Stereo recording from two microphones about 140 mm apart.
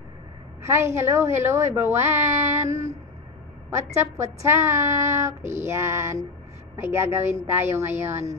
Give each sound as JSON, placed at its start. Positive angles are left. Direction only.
{"t": 0.6, "sound": "a woman's voice", "side_deg": -20}
{"t": 3.7, "sound": "a woman's voice", "side_deg": -20}